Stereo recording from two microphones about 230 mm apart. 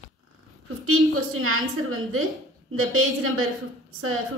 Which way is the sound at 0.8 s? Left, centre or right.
Right.